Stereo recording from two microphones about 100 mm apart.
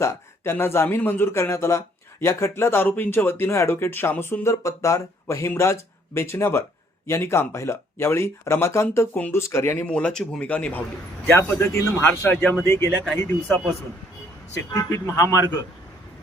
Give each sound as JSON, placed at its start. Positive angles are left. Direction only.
{"t": 0.0, "sound": "speech", "side_deg": 30}
{"t": 9.8, "sound": "speech", "side_deg": 10}
{"t": 14.5, "sound": "a man's voice", "side_deg": 30}